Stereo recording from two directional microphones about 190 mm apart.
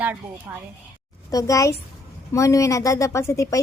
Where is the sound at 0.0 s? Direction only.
10° right (ahead or behind).